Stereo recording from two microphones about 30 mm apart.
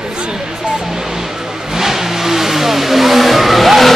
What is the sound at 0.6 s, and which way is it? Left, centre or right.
Speech, centre.